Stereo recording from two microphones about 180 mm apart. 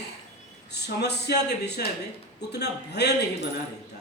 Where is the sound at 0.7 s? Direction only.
70° left (ahead or behind).